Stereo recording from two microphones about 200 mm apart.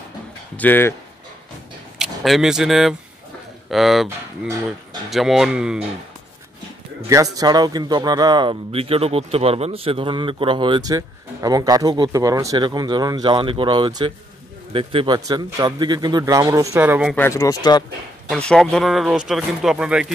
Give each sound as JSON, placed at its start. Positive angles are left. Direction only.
{"t": 0.6, "sound": "speech", "side_deg": 10}
{"t": 2.0, "sound": "speech", "side_deg": 0}
{"t": 5.1, "sound": "speech", "side_deg": 0}
{"t": 7.1, "sound": "a man's voice", "side_deg": -15}
{"t": 17.1, "sound": "speech", "side_deg": 15}
{"t": 18.3, "sound": "speech", "side_deg": 5}